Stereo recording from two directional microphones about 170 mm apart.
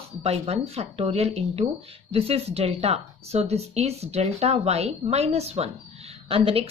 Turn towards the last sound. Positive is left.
turn(degrees=-35)  # may be behind; listen again after turning